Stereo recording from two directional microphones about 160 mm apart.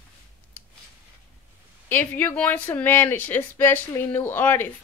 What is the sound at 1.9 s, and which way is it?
Speech, 10° left (ahead or behind).